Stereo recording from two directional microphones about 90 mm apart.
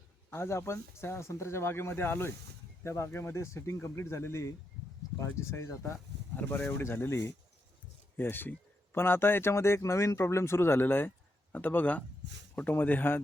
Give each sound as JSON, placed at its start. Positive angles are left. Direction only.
{"t": 0.3, "sound": "speech", "side_deg": 30}
{"t": 6.3, "sound": "speech", "side_deg": 20}